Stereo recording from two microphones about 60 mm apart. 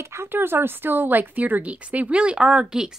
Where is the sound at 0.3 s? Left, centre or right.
Right.